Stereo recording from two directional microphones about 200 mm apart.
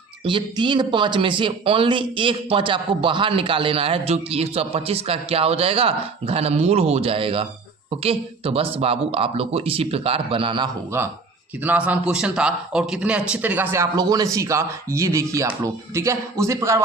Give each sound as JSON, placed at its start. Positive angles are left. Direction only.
{"t": 0.3, "sound": "speech", "side_deg": -25}
{"t": 10.9, "sound": "a man's voice", "side_deg": -10}